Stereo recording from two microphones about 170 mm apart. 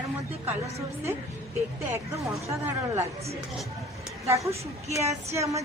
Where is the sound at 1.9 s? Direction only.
15° right (ahead or behind).